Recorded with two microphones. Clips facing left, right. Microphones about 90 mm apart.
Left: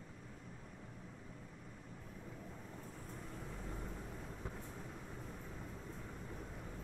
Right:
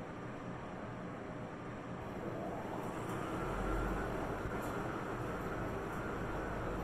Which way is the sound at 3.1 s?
75° right (ahead or behind).